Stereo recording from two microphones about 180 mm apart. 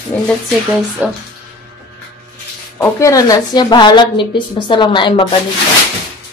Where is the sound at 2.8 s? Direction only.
15° left (ahead or behind).